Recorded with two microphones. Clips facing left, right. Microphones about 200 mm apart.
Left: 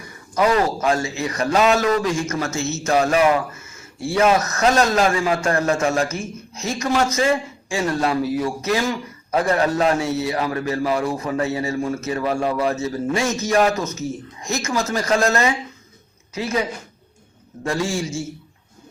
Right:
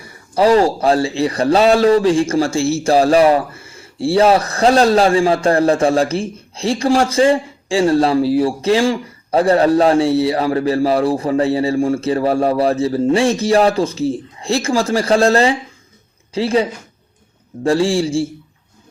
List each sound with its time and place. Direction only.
0.0 s speech: 30° right (ahead or behind)